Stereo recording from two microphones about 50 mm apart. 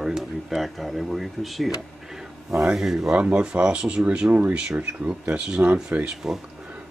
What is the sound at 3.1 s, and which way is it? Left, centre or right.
Speech, right.